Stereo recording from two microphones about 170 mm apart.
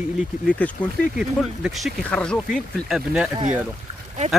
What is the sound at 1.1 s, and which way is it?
Speech, centre (ahead or behind).